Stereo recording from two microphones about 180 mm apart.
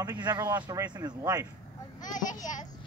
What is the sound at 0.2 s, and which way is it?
Speech, 20° right (ahead or behind).